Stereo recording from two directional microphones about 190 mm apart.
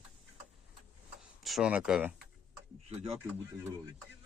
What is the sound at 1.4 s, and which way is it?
Speech, 5° right (ahead or behind).